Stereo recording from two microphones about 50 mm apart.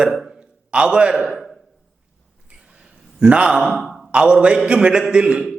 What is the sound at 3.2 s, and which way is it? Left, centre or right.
Speech, centre.